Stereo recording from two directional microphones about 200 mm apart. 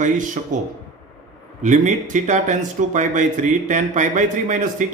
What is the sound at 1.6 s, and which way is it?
Speech, 35° right (ahead or behind).